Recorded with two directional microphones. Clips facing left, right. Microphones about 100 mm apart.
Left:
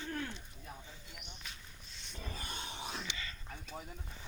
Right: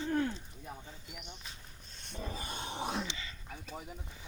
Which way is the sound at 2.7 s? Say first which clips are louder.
Right 10 dB; 50° right (ahead or behind).